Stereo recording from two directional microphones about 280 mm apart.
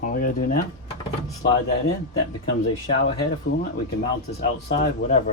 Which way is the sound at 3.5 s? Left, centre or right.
Left.